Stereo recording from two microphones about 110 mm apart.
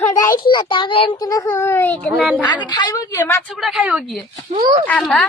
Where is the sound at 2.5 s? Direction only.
45° left (ahead or behind).